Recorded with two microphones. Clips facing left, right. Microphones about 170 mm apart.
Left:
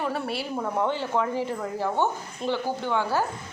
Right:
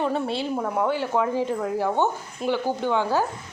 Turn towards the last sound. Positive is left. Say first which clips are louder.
# right 3 dB
turn(degrees=-15)  # may be behind; listen again after turning